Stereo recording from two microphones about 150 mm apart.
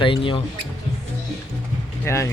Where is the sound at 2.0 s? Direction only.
20° left (ahead or behind).